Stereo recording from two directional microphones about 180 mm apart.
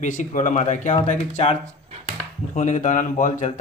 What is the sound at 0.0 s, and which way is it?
Speech, 45° left (ahead or behind).